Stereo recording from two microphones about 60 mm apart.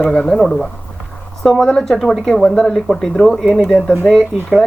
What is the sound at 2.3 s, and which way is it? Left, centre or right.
Speech, centre.